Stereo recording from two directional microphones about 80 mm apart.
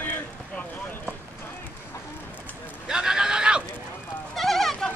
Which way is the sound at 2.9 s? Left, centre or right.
Centre.